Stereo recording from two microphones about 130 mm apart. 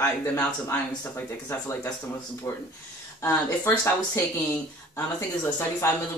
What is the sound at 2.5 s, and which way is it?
Speech, 25° left (ahead or behind).